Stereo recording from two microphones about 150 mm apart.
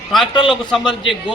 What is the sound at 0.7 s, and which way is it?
Speech, centre (ahead or behind).